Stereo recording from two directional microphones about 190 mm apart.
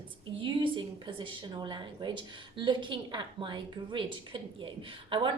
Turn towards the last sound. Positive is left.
turn(degrees=-25)  # may be behind; listen again after turning